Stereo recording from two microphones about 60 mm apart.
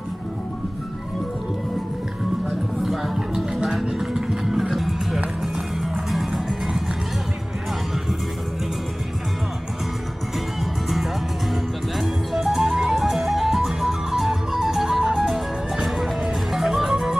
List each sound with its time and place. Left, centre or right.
2.8 s music: centre
10.6 s music: centre